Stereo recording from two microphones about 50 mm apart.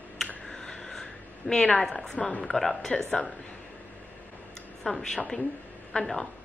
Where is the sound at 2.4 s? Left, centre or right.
Centre.